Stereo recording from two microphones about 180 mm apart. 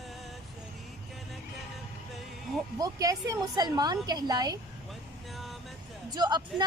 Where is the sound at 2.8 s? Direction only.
20° right (ahead or behind).